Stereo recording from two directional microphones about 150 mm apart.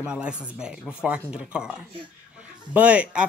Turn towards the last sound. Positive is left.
turn(degrees=-10)  # may be behind; listen again after turning